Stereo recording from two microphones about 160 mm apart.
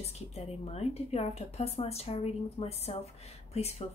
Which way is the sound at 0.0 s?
40° left (ahead or behind).